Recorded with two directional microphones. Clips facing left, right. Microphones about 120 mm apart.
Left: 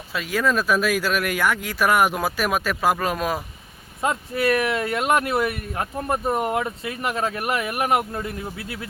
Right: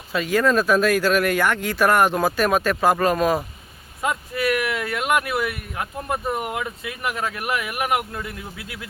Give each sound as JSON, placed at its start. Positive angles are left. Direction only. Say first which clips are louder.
{"t": 0.1, "sound": "speech", "louder": "right 3 dB", "side_deg": 0}
{"t": 4.0, "sound": "speech", "louder": "left 1 dB", "side_deg": 30}